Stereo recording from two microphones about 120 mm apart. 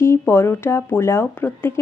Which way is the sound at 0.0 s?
20° left (ahead or behind).